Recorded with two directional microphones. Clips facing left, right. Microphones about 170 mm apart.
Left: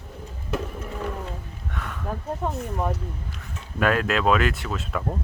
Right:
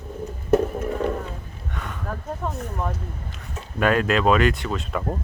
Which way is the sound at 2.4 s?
15° left (ahead or behind).